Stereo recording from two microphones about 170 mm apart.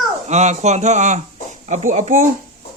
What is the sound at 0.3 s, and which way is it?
Speech, 40° right (ahead or behind).